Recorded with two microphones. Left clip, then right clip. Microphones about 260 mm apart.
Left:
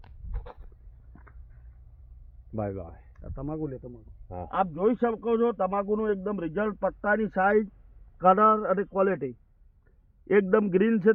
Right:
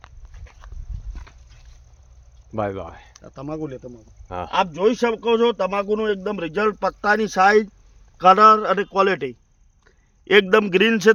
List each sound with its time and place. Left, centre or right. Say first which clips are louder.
2.6 s a man's voice: right 8 dB; centre
3.2 s speech: right 4 dB; centre
4.3 s a man's voice: right 7 dB; centre